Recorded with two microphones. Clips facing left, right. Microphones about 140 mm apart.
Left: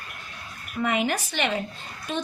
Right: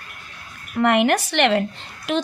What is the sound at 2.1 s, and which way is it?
Speech, 90° right.